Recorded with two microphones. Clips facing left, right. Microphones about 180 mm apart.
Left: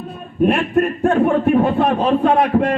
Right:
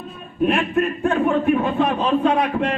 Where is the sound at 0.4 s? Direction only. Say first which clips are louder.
Left 3 dB; 45° left (ahead or behind).